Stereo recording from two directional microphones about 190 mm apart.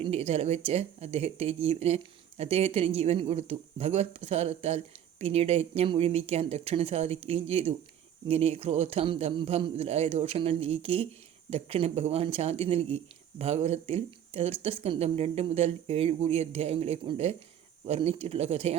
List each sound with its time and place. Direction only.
0.0 s speech: 35° right (ahead or behind)